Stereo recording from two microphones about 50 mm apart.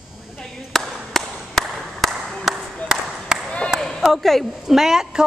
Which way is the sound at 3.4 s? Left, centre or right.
Left.